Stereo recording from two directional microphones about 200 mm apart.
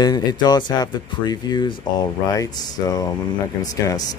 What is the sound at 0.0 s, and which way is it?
Speech, 20° left (ahead or behind).